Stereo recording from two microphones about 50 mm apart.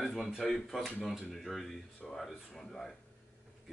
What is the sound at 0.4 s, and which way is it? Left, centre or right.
Speech, centre.